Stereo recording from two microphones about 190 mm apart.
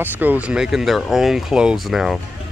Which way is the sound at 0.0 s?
10° right (ahead or behind).